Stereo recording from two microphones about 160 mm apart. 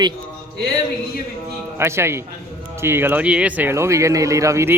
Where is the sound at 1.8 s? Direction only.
15° right (ahead or behind).